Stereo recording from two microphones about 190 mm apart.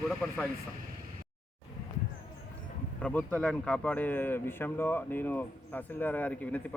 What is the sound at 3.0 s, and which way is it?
Speech, 5° left (ahead or behind).